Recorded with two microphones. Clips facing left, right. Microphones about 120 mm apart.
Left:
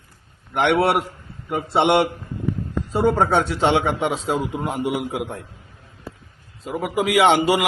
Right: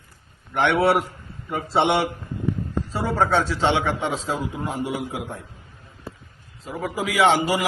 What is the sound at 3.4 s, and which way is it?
A man's voice, 60° left (ahead or behind).